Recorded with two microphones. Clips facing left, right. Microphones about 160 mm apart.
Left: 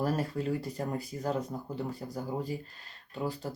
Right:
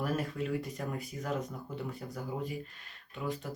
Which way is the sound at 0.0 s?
35° left (ahead or behind).